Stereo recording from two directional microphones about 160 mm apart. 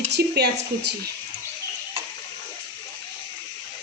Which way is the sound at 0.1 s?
90° right.